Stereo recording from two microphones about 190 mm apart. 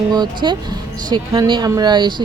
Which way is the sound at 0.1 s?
25° right (ahead or behind).